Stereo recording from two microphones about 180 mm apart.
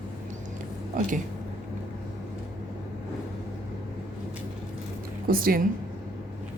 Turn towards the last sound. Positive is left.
turn(degrees=-55)  # may be behind; listen again after turning